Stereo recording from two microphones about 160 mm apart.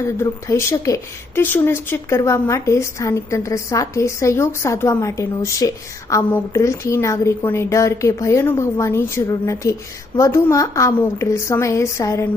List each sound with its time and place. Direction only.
0.2 s a woman's voice: 15° left (ahead or behind)